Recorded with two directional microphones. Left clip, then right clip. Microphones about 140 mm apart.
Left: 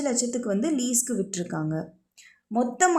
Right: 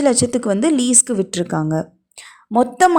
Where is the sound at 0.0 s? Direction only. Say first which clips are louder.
Right 11 dB; 35° right (ahead or behind).